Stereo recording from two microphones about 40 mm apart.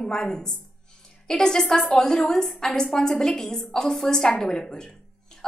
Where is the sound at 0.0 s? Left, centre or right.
Centre.